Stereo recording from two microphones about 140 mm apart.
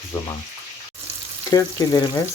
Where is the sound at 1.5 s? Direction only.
25° left (ahead or behind).